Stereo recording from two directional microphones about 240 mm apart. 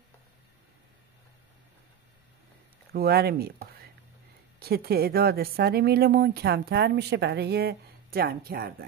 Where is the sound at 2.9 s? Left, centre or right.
Right.